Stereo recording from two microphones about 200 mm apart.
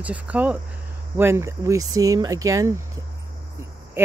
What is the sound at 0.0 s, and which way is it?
Speech, 5° right (ahead or behind).